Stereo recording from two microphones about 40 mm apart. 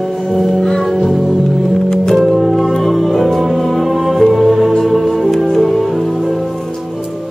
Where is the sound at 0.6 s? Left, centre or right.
Centre.